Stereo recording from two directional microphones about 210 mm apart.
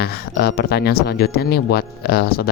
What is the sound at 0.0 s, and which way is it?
Speech, 50° left (ahead or behind).